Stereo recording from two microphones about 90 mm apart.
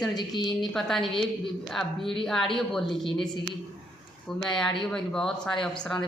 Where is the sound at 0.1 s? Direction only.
50° left (ahead or behind).